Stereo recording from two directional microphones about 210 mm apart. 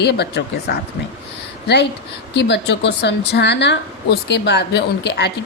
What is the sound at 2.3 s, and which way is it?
A woman's voice, 55° left (ahead or behind).